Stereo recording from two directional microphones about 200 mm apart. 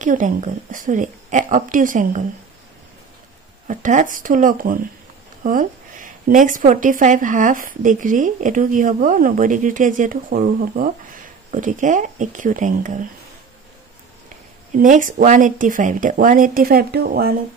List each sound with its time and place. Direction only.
0.0 s speech: 40° right (ahead or behind)
3.6 s speech: 40° right (ahead or behind)
14.8 s speech: 40° right (ahead or behind)